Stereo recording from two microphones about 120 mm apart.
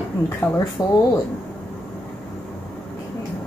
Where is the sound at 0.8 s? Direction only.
35° left (ahead or behind).